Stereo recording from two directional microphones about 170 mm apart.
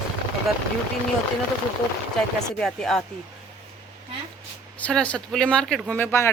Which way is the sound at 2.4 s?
5° left (ahead or behind).